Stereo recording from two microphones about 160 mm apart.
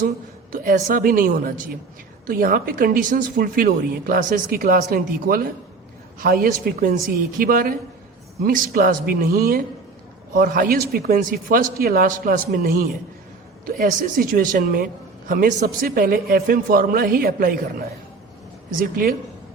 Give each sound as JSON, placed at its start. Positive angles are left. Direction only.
{"t": 0.5, "sound": "speech", "side_deg": -60}
{"t": 18.8, "sound": "speech", "side_deg": -65}